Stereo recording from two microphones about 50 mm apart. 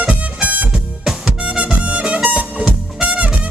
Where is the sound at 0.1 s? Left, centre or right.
Right.